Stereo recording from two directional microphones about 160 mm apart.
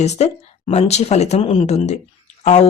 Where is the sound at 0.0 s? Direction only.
45° left (ahead or behind).